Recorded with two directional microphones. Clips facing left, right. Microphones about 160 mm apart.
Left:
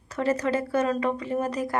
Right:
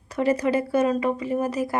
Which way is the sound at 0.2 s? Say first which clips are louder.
Right 3 dB; 15° right (ahead or behind).